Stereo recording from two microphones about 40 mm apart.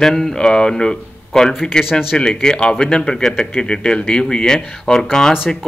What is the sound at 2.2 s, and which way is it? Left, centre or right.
A man's voice, centre.